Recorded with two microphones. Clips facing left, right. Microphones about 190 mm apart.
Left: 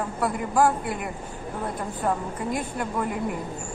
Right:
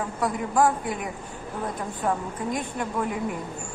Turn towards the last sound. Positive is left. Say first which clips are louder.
# even
turn(degrees=0)  # may be behind; listen again after turning